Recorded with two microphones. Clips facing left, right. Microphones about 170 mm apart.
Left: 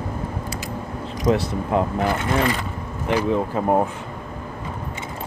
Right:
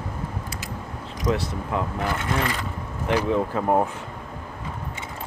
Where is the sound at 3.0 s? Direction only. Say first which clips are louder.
Left 2 dB; 15° left (ahead or behind).